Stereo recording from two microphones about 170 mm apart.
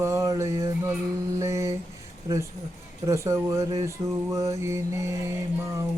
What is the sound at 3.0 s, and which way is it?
Mantra, 15° right (ahead or behind).